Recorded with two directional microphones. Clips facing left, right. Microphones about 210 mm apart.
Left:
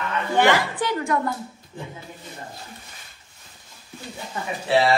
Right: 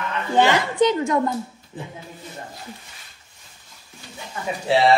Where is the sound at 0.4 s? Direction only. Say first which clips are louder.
Right 3 dB; 20° right (ahead or behind).